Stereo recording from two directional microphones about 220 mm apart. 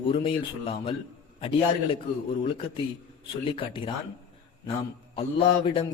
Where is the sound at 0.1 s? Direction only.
25° left (ahead or behind).